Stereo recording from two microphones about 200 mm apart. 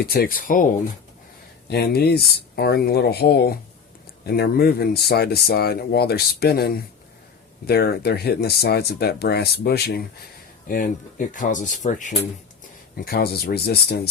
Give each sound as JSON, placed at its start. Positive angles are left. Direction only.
{"t": 0.0, "sound": "speech", "side_deg": 50}
{"t": 13.1, "sound": "speech", "side_deg": 50}